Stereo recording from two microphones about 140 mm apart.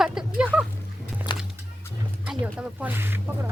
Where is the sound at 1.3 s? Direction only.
30° left (ahead or behind).